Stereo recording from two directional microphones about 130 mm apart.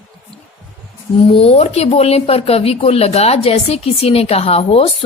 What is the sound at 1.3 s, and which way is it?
Speech, 50° left (ahead or behind).